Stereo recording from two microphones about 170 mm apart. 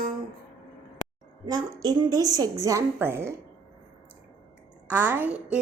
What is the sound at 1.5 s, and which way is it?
A woman's voice, 20° right (ahead or behind).